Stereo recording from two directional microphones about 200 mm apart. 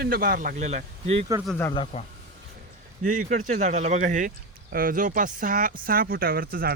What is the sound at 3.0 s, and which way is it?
Speech, 40° right (ahead or behind).